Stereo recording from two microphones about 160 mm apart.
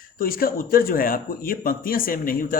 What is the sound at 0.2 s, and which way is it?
Speech, 65° left (ahead or behind).